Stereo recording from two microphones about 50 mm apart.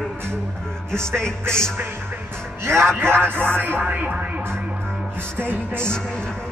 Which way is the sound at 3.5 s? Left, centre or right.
Right.